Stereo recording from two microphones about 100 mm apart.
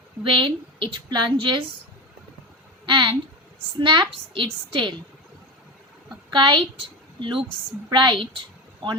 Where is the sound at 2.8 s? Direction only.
50° right (ahead or behind).